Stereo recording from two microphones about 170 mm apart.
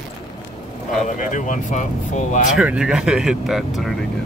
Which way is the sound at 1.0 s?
50° left (ahead or behind).